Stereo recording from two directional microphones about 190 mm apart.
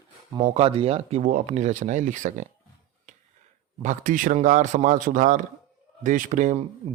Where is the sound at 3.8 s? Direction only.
45° right (ahead or behind).